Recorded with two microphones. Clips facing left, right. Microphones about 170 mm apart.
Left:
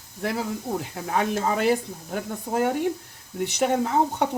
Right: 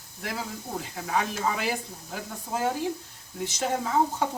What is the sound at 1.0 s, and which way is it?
Speech, 50° left (ahead or behind).